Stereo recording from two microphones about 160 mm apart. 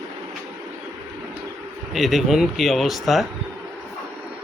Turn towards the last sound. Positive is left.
turn(degrees=0)  # may be behind; listen again after turning